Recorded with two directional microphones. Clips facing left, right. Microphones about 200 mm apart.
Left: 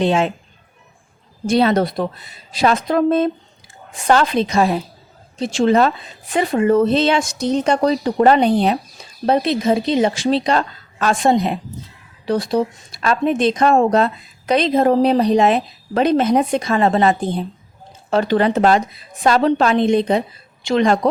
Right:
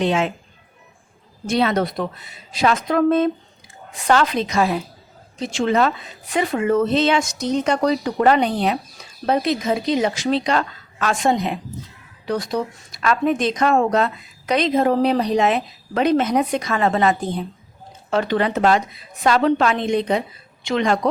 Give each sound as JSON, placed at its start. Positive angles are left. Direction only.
{"t": 0.0, "sound": "speech", "side_deg": 30}
{"t": 1.5, "sound": "speech", "side_deg": 35}